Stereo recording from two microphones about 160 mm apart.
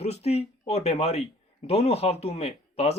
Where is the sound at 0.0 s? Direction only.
40° left (ahead or behind).